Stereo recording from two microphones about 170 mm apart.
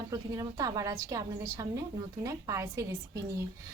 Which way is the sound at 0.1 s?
20° right (ahead or behind).